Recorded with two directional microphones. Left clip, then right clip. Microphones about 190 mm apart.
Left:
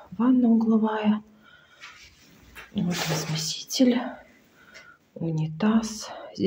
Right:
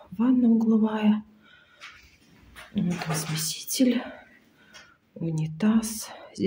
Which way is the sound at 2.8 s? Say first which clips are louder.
Left 2 dB; 10° right (ahead or behind).